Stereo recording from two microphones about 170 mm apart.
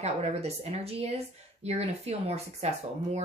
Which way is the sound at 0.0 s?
40° right (ahead or behind).